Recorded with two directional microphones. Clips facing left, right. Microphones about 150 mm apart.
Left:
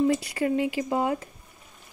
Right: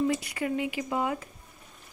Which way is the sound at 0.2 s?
30° left (ahead or behind).